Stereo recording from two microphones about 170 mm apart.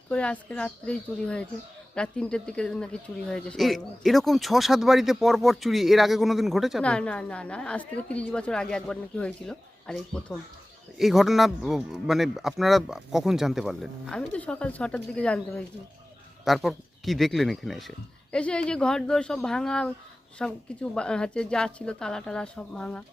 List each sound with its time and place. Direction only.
0.1 s speech: 5° left (ahead or behind)